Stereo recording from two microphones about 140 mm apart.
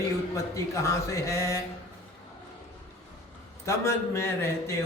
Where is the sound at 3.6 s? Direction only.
20° left (ahead or behind).